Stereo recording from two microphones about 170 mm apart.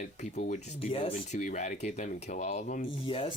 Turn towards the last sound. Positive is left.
turn(degrees=30)  # may be behind; listen again after turning